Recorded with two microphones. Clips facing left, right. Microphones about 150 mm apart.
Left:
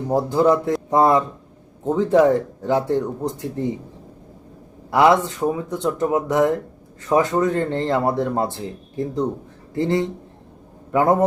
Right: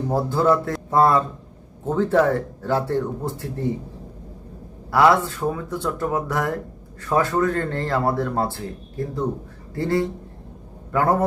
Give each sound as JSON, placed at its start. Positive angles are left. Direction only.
{"t": 0.1, "sound": "speech", "side_deg": 15}
{"t": 4.9, "sound": "speech", "side_deg": 20}